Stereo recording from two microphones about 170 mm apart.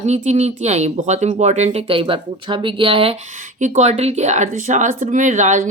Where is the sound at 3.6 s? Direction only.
45° right (ahead or behind).